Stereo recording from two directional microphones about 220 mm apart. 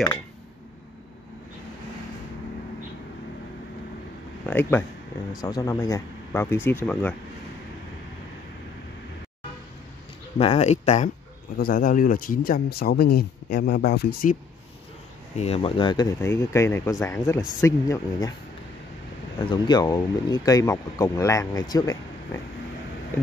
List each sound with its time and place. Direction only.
4.5 s speech: 10° left (ahead or behind)
10.4 s speech: 30° left (ahead or behind)
11.5 s speech: 40° left (ahead or behind)
15.3 s speech: 30° left (ahead or behind)
19.5 s speech: 20° left (ahead or behind)